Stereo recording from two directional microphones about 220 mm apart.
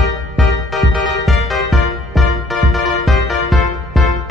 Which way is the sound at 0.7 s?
Centre (ahead or behind).